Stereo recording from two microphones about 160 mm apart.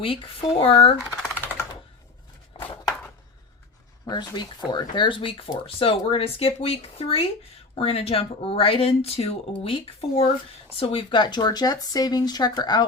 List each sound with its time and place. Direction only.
0.0 s speech: 35° left (ahead or behind)
1.1 s typing: 5° left (ahead or behind)
2.5 s a sound: 35° left (ahead or behind)
4.0 s speech: 25° left (ahead or behind)